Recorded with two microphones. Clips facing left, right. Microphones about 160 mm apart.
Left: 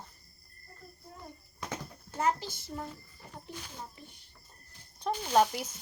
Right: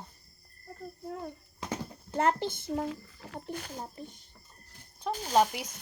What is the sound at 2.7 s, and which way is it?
Speech, 90° right.